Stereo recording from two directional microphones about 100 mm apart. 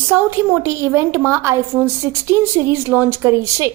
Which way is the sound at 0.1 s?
20° right (ahead or behind).